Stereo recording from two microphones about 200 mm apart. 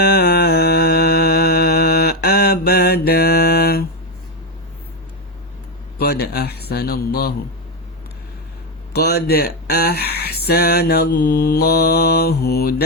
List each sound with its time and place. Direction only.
0.0 s mantra: 55° left (ahead or behind)
6.0 s a man's voice: 50° left (ahead or behind)
9.0 s speech: 55° left (ahead or behind)